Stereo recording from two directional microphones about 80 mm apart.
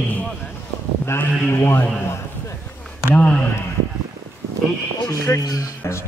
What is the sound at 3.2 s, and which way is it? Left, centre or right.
Speech, centre.